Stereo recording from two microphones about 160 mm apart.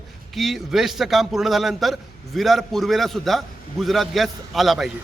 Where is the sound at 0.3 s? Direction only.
Centre (ahead or behind).